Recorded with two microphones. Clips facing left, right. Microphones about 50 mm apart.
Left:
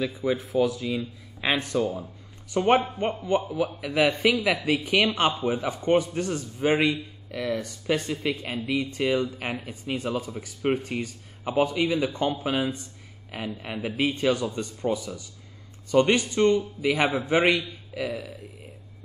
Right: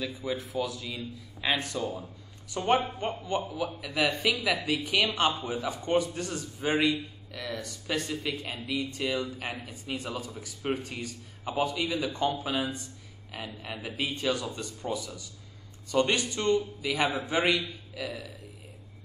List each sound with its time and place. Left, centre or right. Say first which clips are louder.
0.0 s a man's voice: left 6 dB; left